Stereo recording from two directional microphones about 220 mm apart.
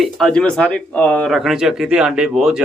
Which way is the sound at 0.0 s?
Centre (ahead or behind).